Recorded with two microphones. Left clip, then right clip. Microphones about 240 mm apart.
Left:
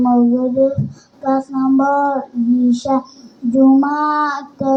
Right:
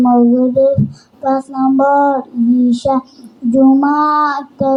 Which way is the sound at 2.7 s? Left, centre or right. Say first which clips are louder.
Right 3 dB; right.